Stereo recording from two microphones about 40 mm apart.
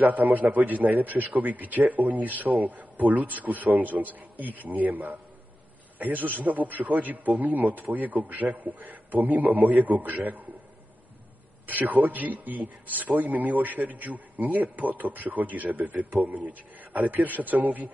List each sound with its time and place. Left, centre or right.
0.0 s a man's voice: right
11.6 s a man's voice: right